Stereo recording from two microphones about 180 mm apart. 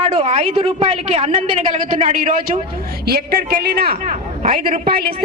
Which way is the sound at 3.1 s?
60° right (ahead or behind).